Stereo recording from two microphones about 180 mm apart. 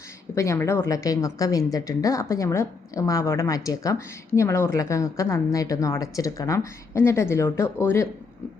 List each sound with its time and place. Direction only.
0.3 s a woman's voice: 15° left (ahead or behind)